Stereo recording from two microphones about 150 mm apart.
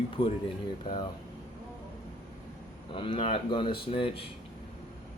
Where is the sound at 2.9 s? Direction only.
35° left (ahead or behind).